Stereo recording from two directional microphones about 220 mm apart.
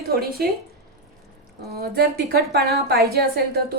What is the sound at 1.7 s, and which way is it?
A woman's voice, 45° right (ahead or behind).